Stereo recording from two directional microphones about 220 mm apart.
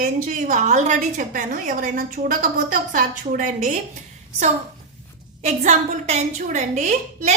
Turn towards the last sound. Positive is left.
turn(degrees=-30)  # may be behind; listen again after turning